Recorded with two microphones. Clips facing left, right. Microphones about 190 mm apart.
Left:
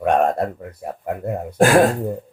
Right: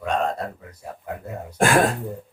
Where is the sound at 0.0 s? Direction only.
60° left (ahead or behind).